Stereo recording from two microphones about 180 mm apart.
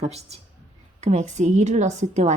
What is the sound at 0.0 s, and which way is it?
A woman's voice, 35° right (ahead or behind).